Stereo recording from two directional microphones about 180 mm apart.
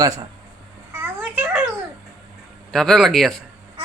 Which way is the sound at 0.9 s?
10° right (ahead or behind).